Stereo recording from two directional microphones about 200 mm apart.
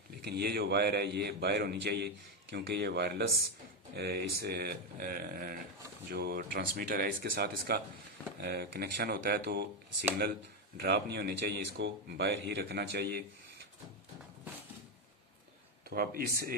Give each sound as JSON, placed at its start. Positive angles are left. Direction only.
{"t": 0.2, "sound": "speech", "side_deg": -55}
{"t": 10.8, "sound": "speech", "side_deg": -55}
{"t": 15.9, "sound": "speech", "side_deg": -50}